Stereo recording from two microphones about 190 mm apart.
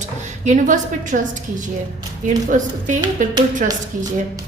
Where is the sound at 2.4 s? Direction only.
40° right (ahead or behind).